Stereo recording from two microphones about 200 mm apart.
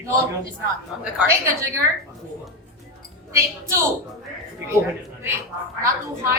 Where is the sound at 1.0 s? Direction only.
10° right (ahead or behind).